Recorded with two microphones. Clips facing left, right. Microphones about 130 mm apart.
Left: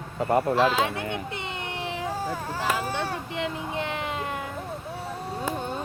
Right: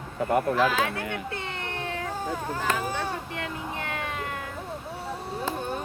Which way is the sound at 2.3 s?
5° left (ahead or behind).